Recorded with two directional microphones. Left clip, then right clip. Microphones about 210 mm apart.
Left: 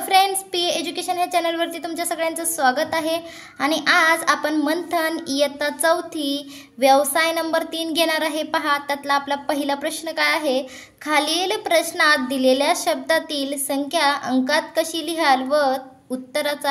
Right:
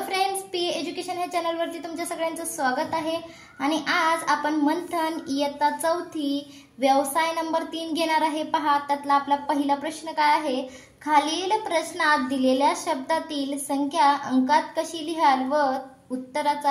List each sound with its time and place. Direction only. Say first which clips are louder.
0.1 s a woman's voice: left 10 dB; 35° left (ahead or behind)
3.6 s child singing: left 6 dB; 40° left (ahead or behind)